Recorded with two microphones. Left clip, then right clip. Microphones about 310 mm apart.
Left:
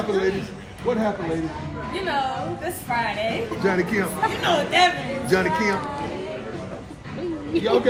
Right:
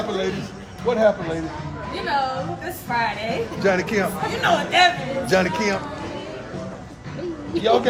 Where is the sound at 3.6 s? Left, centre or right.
Right.